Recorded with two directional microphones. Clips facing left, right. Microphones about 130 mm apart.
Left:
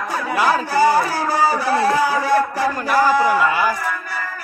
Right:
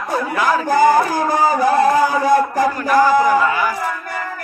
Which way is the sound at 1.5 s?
45° right (ahead or behind).